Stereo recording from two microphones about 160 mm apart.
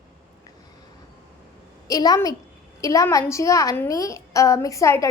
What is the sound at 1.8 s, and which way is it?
A woman's voice, 25° left (ahead or behind).